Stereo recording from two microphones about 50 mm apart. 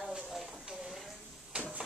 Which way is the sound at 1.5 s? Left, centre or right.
Right.